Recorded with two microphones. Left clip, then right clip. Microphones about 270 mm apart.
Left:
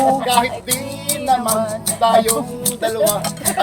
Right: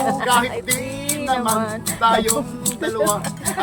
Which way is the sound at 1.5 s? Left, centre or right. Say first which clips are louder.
Left 3 dB; right.